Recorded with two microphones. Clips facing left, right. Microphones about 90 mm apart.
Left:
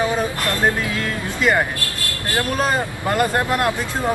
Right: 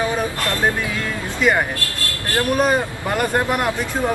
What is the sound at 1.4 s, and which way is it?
Speech, centre (ahead or behind).